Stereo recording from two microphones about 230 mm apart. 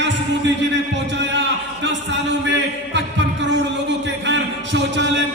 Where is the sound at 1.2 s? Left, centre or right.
Right.